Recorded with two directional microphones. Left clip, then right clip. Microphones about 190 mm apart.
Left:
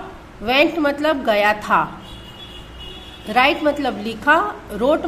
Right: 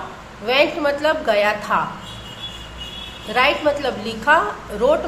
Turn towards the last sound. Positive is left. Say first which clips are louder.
# right 1 dB
turn(degrees=25)  # may be behind; listen again after turning